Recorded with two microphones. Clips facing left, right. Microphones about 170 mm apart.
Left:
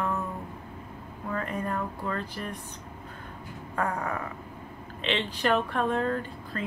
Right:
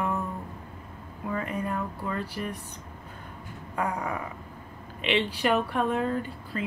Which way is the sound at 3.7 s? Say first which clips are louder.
Even; 10° right (ahead or behind).